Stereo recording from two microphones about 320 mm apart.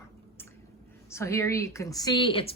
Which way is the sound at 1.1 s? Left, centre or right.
Centre.